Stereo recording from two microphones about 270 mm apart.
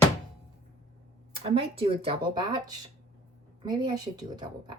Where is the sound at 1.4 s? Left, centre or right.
Right.